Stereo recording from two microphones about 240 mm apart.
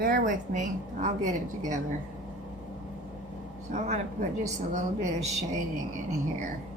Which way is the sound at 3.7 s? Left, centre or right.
Right.